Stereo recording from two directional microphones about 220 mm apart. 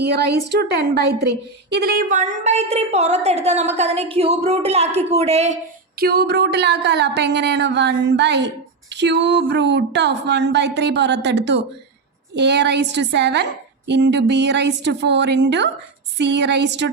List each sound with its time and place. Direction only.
0.0 s a woman's voice: 50° right (ahead or behind); by 5.5 s 30° right (ahead or behind)
6.0 s speech: 45° right (ahead or behind)